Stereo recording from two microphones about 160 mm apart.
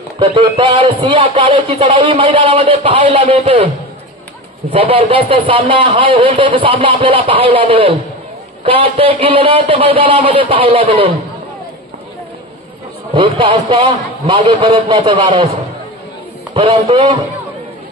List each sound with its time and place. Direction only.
0.2 s music: 35° right (ahead or behind)
13.1 s music: 35° right (ahead or behind)
16.5 s music: 40° right (ahead or behind)